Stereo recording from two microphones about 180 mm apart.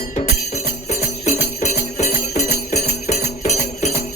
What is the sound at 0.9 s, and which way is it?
Jingle bell, 40° left (ahead or behind).